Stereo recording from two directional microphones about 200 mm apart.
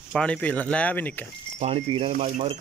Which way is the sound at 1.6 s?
30° right (ahead or behind).